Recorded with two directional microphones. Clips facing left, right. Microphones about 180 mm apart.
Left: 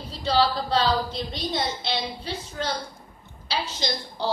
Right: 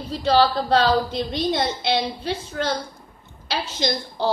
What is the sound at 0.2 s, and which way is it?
A woman's voice, 55° right (ahead or behind).